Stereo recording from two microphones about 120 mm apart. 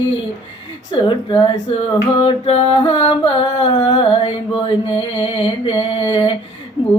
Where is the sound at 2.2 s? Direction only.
45° left (ahead or behind).